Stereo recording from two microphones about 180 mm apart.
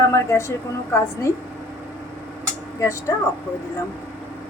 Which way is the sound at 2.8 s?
15° left (ahead or behind).